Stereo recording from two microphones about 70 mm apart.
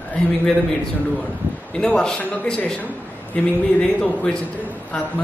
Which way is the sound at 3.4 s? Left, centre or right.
Centre.